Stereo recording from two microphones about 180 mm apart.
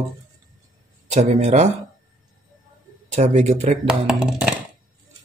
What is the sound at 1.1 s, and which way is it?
Speech, 40° right (ahead or behind).